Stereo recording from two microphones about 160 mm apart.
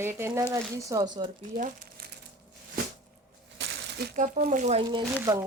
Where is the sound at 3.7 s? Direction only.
90° right.